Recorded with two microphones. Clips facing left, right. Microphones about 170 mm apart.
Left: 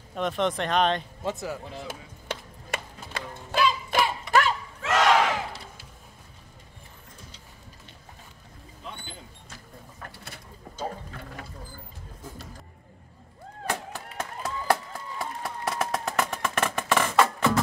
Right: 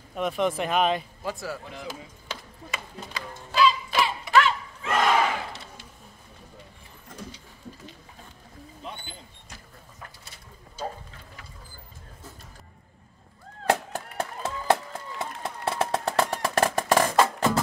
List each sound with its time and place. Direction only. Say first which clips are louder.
0.1 s speech: right 1 dB; 5° right (ahead or behind)
1.2 s a man's voice: left 2 dB; 20° left (ahead or behind)
2.2 s music: left 6 dB; 55° left (ahead or behind)
4.3 s a sound: right 3 dB; 45° left (ahead or behind)
4.8 s battle cry: left 1 dB; 90° left
14.1 s run: right 1 dB; 25° right (ahead or behind)